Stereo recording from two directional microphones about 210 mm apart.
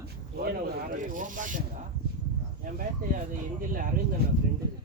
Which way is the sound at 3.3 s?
40° right (ahead or behind).